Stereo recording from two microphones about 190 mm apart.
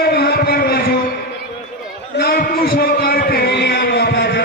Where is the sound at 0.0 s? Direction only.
60° left (ahead or behind).